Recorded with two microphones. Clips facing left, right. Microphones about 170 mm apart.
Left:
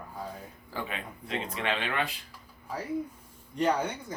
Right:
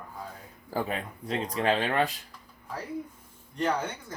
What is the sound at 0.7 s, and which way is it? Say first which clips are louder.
Speech: right 6 dB; 40° right (ahead or behind).